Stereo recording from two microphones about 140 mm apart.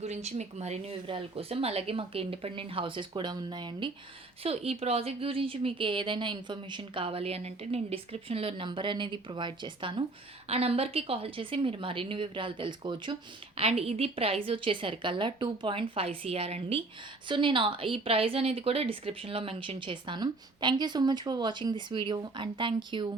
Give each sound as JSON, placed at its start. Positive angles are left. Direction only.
{"t": 0.0, "sound": "speech", "side_deg": -50}
{"t": 4.4, "sound": "speech", "side_deg": -45}
{"t": 10.5, "sound": "speech", "side_deg": -45}
{"t": 13.6, "sound": "a woman's voice", "side_deg": -45}